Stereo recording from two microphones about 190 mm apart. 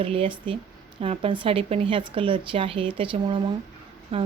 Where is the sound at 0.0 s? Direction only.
30° right (ahead or behind).